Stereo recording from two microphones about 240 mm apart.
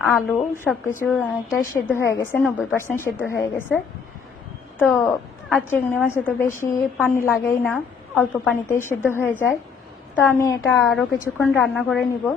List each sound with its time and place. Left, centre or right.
0.0 s a woman's voice: centre
1.1 s a woman's voice: centre
1.6 s a woman's voice: centre
4.8 s a woman's voice: centre